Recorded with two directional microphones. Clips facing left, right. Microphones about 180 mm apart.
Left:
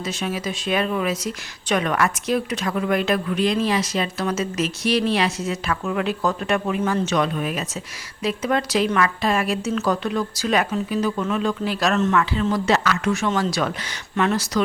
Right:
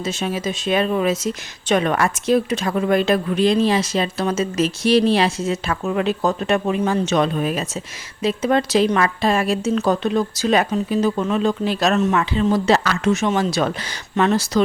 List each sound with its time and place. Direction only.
0.0 s speech: 25° right (ahead or behind)
13.1 s speech: 20° right (ahead or behind)